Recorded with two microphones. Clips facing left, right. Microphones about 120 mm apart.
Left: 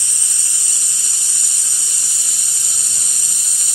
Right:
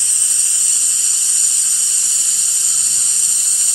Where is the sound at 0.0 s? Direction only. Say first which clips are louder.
Left 1 dB; 20° right (ahead or behind).